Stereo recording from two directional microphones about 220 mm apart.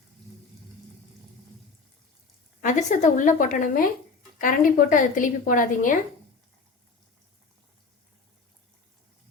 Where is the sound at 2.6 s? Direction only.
35° left (ahead or behind).